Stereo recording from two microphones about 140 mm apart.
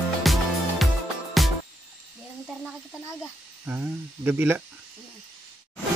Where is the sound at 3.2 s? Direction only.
10° right (ahead or behind).